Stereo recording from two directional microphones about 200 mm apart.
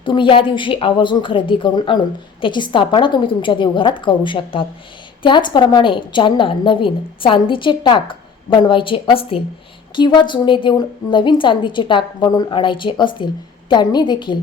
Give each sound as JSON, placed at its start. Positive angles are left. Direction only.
{"t": 0.0, "sound": "a woman's voice", "side_deg": 25}